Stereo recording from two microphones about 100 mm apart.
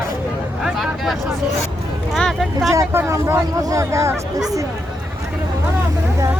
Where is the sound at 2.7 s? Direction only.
30° right (ahead or behind).